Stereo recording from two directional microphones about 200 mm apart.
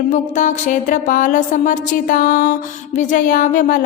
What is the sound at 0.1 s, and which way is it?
A woman's voice, 35° left (ahead or behind).